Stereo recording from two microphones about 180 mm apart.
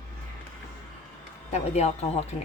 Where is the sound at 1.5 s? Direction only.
35° left (ahead or behind).